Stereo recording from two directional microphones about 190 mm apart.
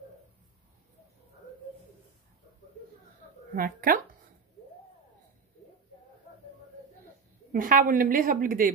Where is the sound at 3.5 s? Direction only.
50° right (ahead or behind).